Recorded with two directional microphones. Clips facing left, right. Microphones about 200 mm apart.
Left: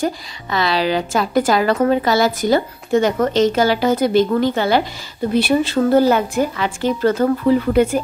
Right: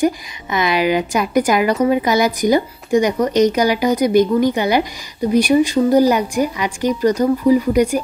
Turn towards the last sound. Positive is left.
turn(degrees=-10)  # may be behind; listen again after turning